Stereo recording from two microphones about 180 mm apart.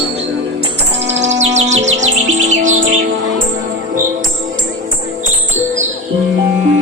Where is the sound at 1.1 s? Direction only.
40° right (ahead or behind).